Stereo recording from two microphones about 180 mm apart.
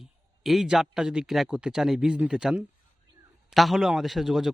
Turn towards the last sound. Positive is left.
turn(degrees=0)  # may be behind; listen again after turning